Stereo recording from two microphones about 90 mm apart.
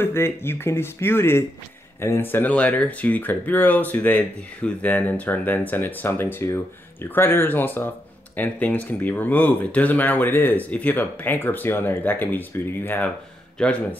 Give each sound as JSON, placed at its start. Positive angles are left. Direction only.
{"t": 0.0, "sound": "speech", "side_deg": 25}